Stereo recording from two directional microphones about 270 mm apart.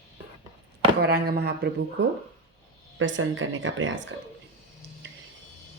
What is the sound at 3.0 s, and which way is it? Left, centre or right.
A woman's voice, right.